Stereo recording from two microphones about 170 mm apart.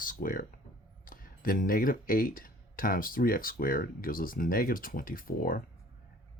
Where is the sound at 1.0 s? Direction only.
55° left (ahead or behind).